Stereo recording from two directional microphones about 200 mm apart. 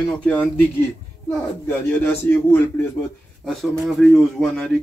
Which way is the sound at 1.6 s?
10° left (ahead or behind).